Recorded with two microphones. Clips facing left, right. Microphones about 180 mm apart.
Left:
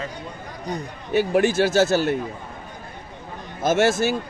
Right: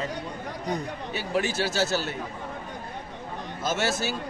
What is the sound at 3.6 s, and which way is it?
Speech, 50° left (ahead or behind).